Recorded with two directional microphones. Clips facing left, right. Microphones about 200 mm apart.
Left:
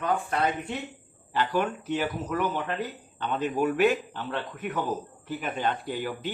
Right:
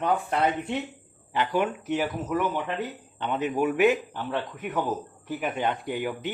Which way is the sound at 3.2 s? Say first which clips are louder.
Right 1 dB; 15° right (ahead or behind).